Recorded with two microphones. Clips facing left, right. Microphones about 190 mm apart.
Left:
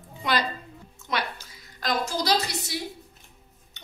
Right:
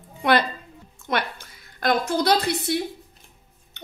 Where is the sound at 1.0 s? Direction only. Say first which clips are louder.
Right 4 dB; 55° right (ahead or behind).